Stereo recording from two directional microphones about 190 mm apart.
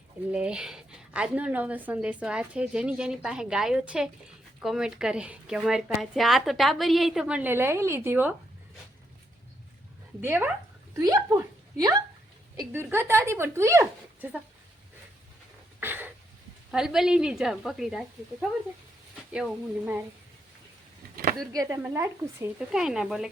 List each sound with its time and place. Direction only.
0.3 s a woman's voice: 5° right (ahead or behind)
10.2 s a woman's voice: 10° right (ahead or behind)
15.8 s a sound: 10° right (ahead or behind)
16.7 s a woman's voice: centre (ahead or behind)
19.3 s a woman's voice: 5° right (ahead or behind)
21.5 s a woman's voice: 15° right (ahead or behind)
22.7 s a woman's voice: 5° right (ahead or behind)